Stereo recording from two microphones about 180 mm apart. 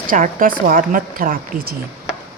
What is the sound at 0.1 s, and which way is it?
Speech, 50° right (ahead or behind).